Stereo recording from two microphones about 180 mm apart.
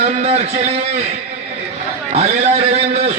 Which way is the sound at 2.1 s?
35° right (ahead or behind).